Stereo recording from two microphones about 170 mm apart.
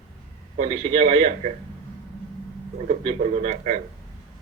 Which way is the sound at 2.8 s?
50° right (ahead or behind).